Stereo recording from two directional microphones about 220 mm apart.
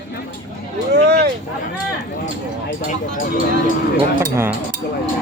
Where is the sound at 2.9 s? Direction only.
40° left (ahead or behind).